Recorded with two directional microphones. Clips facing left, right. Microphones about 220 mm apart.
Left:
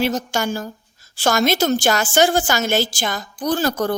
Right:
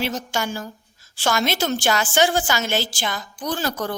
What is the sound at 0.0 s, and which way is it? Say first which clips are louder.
A woman's voice: left 5 dB; 45° left (ahead or behind).